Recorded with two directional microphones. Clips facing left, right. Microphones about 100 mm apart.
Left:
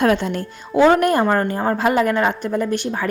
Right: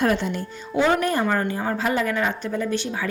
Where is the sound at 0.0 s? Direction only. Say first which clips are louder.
Left 4 dB; 90° left.